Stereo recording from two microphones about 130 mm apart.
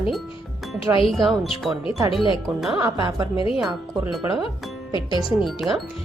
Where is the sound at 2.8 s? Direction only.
35° right (ahead or behind).